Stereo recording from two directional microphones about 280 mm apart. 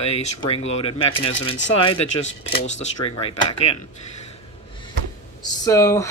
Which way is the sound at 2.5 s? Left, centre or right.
Left.